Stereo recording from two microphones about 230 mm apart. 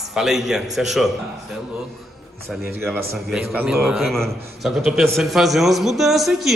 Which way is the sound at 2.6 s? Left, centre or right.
Centre.